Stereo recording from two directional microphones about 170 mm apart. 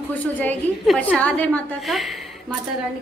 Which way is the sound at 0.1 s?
10° left (ahead or behind).